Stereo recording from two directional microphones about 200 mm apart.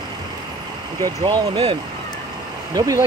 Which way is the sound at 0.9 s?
20° right (ahead or behind).